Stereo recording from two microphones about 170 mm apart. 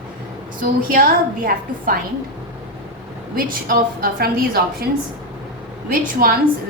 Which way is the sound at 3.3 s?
60° right (ahead or behind).